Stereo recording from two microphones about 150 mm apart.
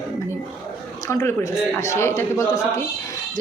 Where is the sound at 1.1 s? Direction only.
20° left (ahead or behind).